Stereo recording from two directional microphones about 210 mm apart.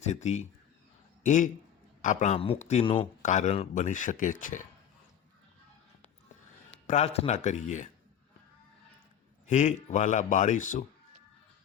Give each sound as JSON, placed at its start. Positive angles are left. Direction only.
{"t": 0.0, "sound": "a man's voice", "side_deg": 35}
{"t": 6.8, "sound": "a man's voice", "side_deg": 30}
{"t": 9.5, "sound": "a man's voice", "side_deg": 35}